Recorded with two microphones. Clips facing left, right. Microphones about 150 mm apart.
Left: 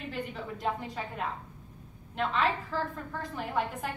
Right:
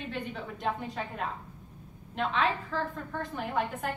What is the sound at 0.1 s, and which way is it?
A woman's voice, centre (ahead or behind).